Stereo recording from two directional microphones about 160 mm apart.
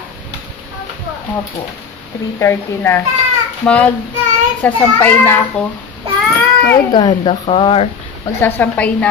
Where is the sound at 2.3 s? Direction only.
15° left (ahead or behind).